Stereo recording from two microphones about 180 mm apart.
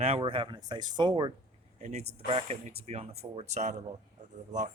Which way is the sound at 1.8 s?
40° right (ahead or behind).